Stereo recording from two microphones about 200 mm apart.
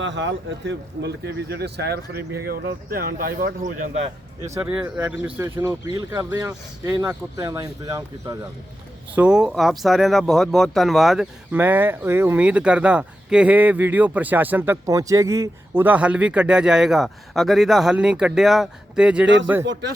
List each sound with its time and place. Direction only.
0.0 s speech: 65° right (ahead or behind); by 3.7 s 45° right (ahead or behind)
4.5 s speech: 10° right (ahead or behind)
9.1 s speech: 5° right (ahead or behind)